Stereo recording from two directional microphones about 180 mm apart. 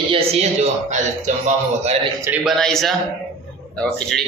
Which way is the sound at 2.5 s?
Centre (ahead or behind).